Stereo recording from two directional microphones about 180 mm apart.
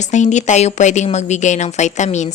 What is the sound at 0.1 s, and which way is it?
A woman's voice, 40° left (ahead or behind).